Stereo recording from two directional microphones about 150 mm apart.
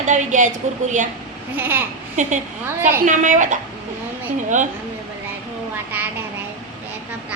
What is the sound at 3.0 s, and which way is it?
A woman's voice, 55° right (ahead or behind).